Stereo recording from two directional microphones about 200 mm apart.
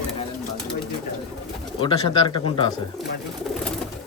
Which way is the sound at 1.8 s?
25° left (ahead or behind).